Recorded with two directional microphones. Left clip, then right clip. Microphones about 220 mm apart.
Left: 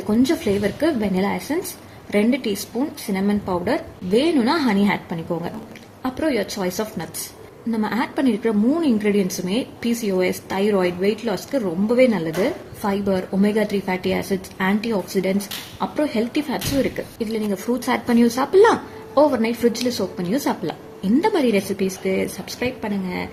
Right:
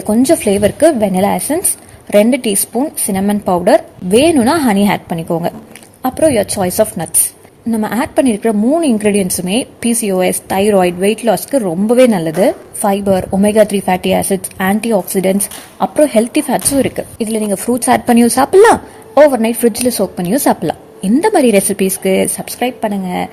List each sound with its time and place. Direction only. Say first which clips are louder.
0.1 s a woman's voice: right 9 dB; 35° right (ahead or behind)